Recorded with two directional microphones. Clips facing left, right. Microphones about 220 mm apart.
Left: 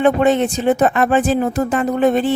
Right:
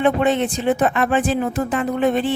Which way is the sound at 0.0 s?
40° left (ahead or behind).